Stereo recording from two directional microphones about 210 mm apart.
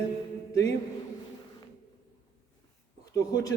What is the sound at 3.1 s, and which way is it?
Speech, 15° left (ahead or behind).